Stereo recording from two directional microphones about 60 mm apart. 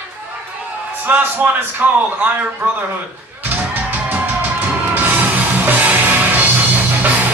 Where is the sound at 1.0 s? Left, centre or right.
Right.